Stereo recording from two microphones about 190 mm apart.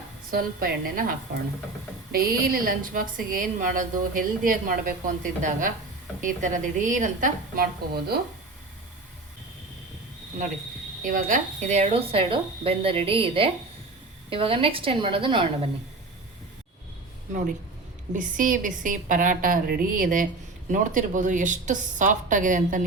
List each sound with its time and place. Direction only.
0.3 s a woman's voice: 50° right (ahead or behind)
2.1 s a woman's voice: 50° right (ahead or behind)
11.0 s a woman's voice: 45° right (ahead or behind); by 15.4 s 25° right (ahead or behind)
18.1 s a woman's voice: 45° right (ahead or behind)